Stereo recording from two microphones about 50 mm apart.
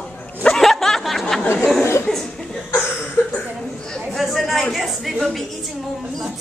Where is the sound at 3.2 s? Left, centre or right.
Left.